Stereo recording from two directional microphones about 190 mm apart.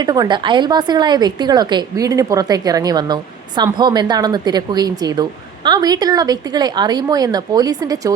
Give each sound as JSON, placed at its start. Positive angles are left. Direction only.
{"t": 0.0, "sound": "a woman's voice", "side_deg": -20}